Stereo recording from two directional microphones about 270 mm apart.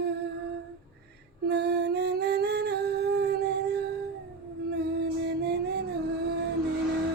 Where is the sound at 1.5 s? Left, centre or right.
Right.